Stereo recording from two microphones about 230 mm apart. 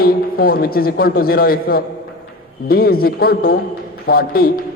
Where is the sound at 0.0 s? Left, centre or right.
Left.